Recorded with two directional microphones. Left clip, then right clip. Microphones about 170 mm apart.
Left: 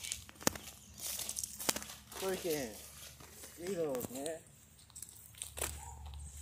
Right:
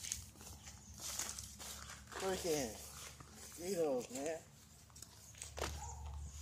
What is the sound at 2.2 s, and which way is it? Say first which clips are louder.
Speech: left 2 dB; 35° left (ahead or behind).